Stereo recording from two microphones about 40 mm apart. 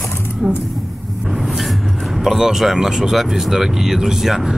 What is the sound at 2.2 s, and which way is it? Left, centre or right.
Speech, centre.